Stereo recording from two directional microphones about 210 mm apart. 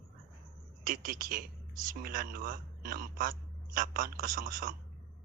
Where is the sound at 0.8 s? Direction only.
40° right (ahead or behind).